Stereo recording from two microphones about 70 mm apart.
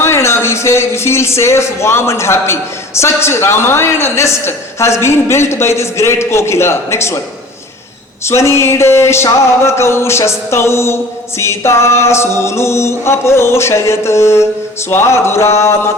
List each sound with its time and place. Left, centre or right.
0.0 s speech: left
8.2 s speech: left